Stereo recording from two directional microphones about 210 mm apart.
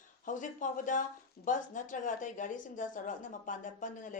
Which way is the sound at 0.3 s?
40° left (ahead or behind).